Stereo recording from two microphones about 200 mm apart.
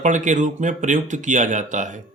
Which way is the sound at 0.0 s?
40° right (ahead or behind).